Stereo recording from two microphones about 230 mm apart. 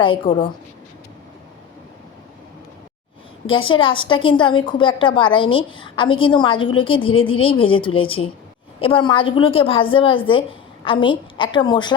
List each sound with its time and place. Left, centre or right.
0.0 s a woman's voice: left
3.5 s a woman's voice: left